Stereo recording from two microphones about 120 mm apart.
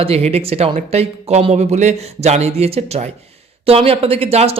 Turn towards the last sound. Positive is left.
turn(degrees=-60)  # may be behind; listen again after turning